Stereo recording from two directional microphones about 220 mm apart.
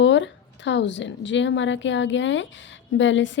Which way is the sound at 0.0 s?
55° left (ahead or behind).